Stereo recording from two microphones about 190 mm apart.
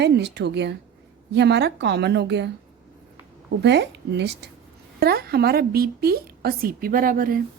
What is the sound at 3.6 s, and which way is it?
A woman's voice, 65° right (ahead or behind).